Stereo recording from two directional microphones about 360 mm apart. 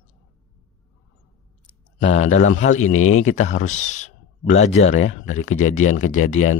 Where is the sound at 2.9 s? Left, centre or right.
Left.